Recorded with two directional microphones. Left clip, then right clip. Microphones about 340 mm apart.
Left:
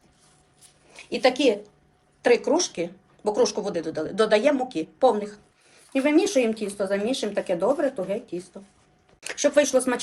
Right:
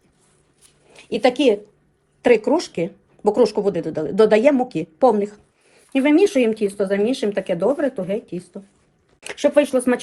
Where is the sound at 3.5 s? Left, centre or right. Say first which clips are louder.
Right 6 dB; right.